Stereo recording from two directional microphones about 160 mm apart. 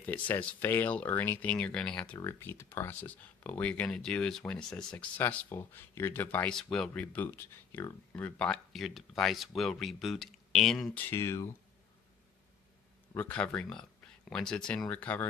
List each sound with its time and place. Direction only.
0.0 s speech: 10° left (ahead or behind)
11.1 s speech: 15° left (ahead or behind)
13.1 s speech: 10° left (ahead or behind)